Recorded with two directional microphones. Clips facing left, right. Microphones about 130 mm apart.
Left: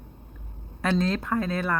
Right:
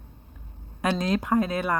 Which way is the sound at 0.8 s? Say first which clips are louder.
Even; 15° right (ahead or behind).